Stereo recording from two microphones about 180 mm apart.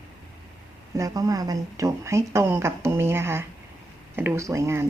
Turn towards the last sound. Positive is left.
turn(degrees=-15)  # may be behind; listen again after turning